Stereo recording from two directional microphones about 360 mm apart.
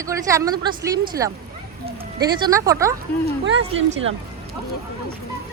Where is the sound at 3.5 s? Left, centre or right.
Right.